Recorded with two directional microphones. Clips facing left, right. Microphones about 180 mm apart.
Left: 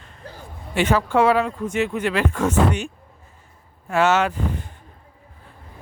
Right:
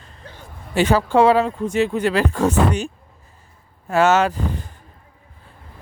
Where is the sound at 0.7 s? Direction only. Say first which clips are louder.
Right 3 dB; 35° right (ahead or behind).